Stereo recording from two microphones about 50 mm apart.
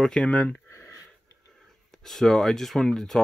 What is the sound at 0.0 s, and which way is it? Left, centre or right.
Speech, centre.